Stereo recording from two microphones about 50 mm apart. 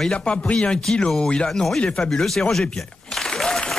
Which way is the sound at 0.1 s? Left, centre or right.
Left.